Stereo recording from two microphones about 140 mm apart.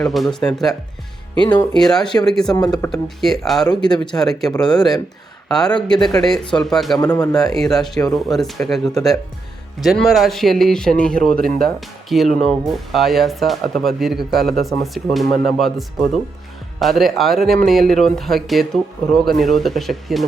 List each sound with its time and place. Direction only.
0.0 s speech: centre (ahead or behind)
1.4 s speech: 30° left (ahead or behind)
1.7 s a man's voice: 5° left (ahead or behind)
7.0 s speech: 25° left (ahead or behind)
7.3 s speech: centre (ahead or behind)
16.8 s speech: centre (ahead or behind)